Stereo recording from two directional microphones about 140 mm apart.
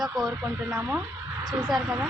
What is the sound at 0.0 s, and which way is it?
Speech, centre (ahead or behind).